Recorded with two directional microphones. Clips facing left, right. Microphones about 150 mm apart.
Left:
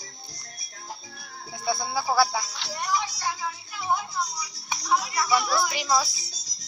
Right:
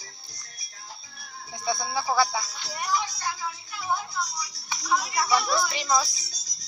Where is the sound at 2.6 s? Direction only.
85° left.